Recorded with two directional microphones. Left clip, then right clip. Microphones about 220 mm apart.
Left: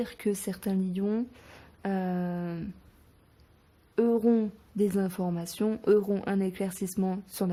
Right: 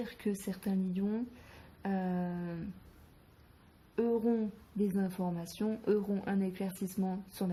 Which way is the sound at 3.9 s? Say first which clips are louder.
Left 7 dB; 45° left (ahead or behind).